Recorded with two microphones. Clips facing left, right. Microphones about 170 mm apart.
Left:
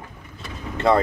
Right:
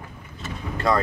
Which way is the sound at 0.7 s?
25° left (ahead or behind).